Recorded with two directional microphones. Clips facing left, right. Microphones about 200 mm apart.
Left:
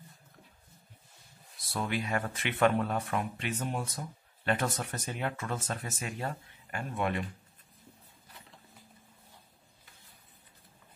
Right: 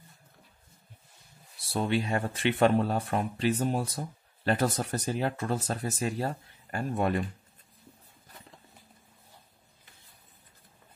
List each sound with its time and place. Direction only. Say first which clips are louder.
1.6 s speech: right 5 dB; 30° right (ahead or behind)